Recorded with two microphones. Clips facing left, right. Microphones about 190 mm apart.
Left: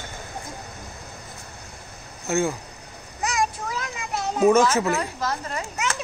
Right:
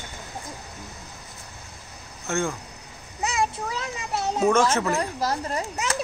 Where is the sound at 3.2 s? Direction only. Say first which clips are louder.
Even; 25° right (ahead or behind).